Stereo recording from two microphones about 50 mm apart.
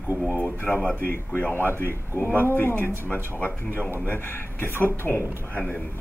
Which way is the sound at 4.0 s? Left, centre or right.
Left.